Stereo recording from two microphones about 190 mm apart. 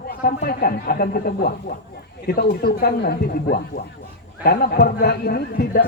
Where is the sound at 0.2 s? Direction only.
50° left (ahead or behind).